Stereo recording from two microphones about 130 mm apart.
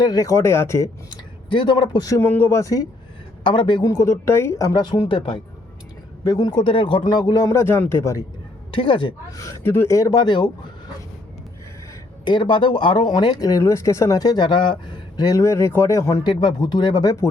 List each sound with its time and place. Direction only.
0.0 s speech: 30° left (ahead or behind)
1.1 s speech: 35° left (ahead or behind)
2.2 s speech: 15° left (ahead or behind)
3.4 s speech: 40° left (ahead or behind); by 8.2 s 20° left (ahead or behind)
8.7 s speech: 40° left (ahead or behind)
9.4 s speech: 20° left (ahead or behind)
12.2 s speech: 35° left (ahead or behind)